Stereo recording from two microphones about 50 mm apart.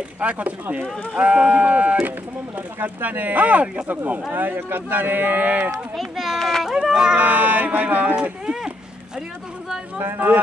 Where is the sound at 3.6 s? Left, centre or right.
Right.